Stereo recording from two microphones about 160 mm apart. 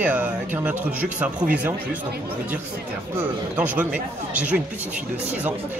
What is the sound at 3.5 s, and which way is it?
Speech, 10° right (ahead or behind).